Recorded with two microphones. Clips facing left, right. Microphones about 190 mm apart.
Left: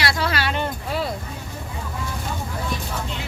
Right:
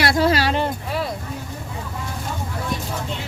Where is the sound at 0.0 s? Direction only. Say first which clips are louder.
Right 6 dB; 45° right (ahead or behind).